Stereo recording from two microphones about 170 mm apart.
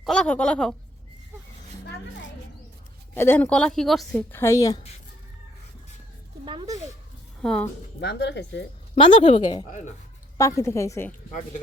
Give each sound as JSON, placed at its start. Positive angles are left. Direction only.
{"t": 0.0, "sound": "a woman's voice", "side_deg": 5}
{"t": 3.2, "sound": "a woman's voice", "side_deg": 10}
{"t": 4.3, "sound": "a woman's voice", "side_deg": 15}
{"t": 6.4, "sound": "speech", "side_deg": -30}
{"t": 7.4, "sound": "a woman's voice", "side_deg": 5}
{"t": 8.0, "sound": "speech", "side_deg": 90}
{"t": 9.0, "sound": "speech", "side_deg": 30}
{"t": 10.3, "sound": "a woman's voice", "side_deg": 20}